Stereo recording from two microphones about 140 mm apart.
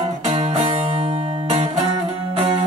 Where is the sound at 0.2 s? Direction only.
45° right (ahead or behind).